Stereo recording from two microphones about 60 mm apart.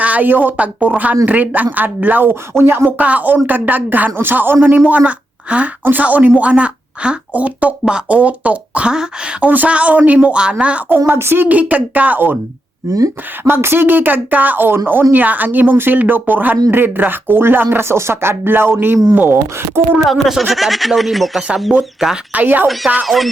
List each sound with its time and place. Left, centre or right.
0.0 s speech: right
2.3 s speech: right
3.0 s speech: right
4.9 s a woman's voice: right
9.5 s speech: right
10.8 s speech: right
11.4 s speech: right
12.9 s speech: right
13.5 s speech: right
20.1 s speech: centre
22.3 s speech: right
22.6 s speech: centre